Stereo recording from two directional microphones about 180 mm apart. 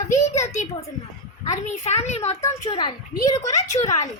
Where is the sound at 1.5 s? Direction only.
40° left (ahead or behind).